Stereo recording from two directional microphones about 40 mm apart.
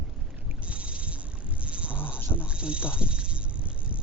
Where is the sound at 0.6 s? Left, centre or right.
Right.